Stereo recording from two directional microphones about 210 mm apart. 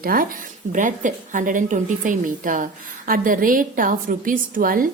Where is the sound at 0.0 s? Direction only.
45° right (ahead or behind).